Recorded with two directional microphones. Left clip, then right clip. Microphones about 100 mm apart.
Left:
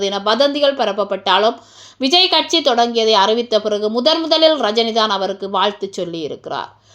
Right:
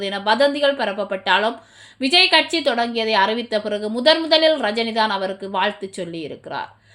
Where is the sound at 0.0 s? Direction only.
20° left (ahead or behind).